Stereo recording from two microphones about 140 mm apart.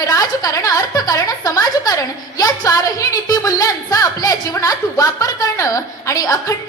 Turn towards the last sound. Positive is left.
turn(degrees=25)  # may be behind; listen again after turning